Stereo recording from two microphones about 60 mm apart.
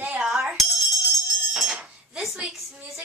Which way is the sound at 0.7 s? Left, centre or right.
Centre.